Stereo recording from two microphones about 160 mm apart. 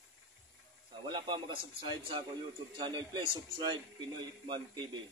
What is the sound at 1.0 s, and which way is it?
A man's voice, 30° right (ahead or behind).